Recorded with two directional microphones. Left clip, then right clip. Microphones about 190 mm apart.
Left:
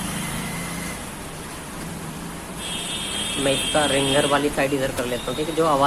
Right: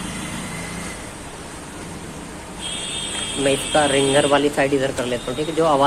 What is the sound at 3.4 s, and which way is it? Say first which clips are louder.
Speech: right 3 dB; 15° right (ahead or behind).